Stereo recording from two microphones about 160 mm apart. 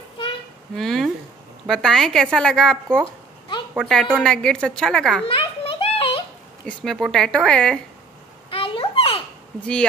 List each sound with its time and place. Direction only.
0.7 s a woman's voice: centre (ahead or behind)
5.3 s a sound: 35° left (ahead or behind)
6.8 s a woman's voice: 5° left (ahead or behind)
8.5 s children playing: 35° left (ahead or behind)